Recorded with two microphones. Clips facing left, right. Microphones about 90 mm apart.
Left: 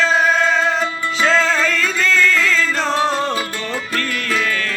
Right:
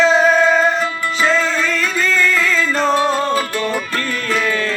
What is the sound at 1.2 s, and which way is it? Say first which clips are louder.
Music: left 1 dB; 90° left.